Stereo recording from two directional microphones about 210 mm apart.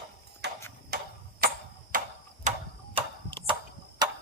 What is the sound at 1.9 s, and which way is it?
Tick-tock, 40° right (ahead or behind).